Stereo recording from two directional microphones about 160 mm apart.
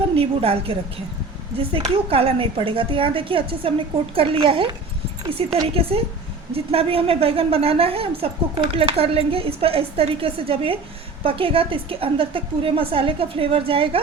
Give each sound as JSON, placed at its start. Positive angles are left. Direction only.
{"t": 0.2, "sound": "a woman's voice", "side_deg": -35}